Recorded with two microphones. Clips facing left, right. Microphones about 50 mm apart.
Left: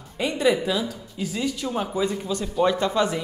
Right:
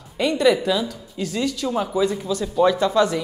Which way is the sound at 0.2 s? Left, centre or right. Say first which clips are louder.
Right 4 dB; centre.